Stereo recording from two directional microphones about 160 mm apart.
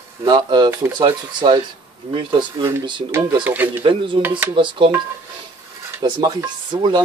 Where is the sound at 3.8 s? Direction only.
30° right (ahead or behind).